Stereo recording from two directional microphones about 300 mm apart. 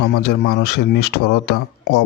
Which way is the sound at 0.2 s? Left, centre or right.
Left.